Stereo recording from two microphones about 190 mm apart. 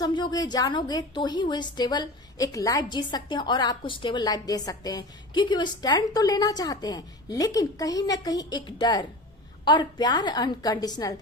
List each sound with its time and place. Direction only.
0.0 s a woman's voice: 20° left (ahead or behind)